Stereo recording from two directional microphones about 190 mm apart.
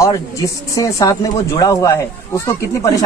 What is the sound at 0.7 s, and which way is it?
Speech, 15° left (ahead or behind).